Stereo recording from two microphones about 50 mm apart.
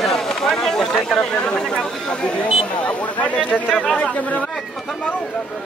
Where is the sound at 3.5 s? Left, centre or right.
Left.